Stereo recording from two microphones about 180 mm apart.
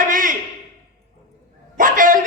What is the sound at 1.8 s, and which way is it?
Speech, 50° right (ahead or behind).